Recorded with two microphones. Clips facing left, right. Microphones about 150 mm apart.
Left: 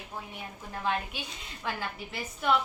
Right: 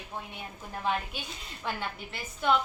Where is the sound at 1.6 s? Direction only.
Centre (ahead or behind).